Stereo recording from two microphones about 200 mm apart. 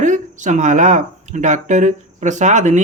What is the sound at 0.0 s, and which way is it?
Speech, 40° right (ahead or behind).